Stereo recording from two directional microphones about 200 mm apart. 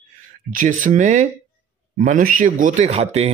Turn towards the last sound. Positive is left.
turn(degrees=-30)  # may be behind; listen again after turning